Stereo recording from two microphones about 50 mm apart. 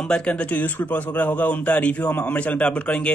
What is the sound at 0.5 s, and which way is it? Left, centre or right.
Speech, left.